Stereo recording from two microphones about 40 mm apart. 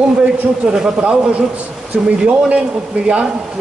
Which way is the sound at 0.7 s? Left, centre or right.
Right.